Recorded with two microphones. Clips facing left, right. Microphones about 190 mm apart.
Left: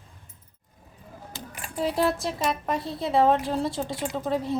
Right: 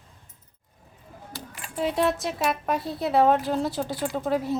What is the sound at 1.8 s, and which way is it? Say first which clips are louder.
A woman's voice: even; centre (ahead or behind).